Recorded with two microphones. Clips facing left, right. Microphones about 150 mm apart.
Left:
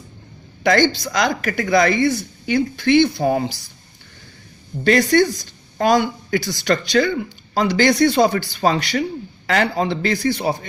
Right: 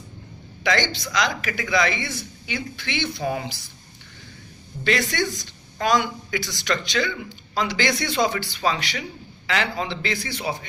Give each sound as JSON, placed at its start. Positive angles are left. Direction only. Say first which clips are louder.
{"t": 0.6, "sound": "speech", "louder": "left 8 dB", "side_deg": 45}
{"t": 4.8, "sound": "a woman's voice", "louder": "left 9 dB", "side_deg": 45}